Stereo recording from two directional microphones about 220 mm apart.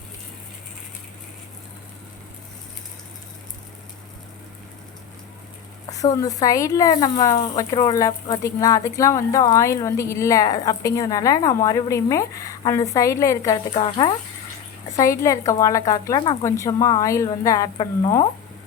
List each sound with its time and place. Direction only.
5.9 s speech: 15° left (ahead or behind)